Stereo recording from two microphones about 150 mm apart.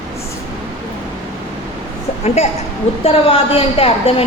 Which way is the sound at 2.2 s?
45° left (ahead or behind).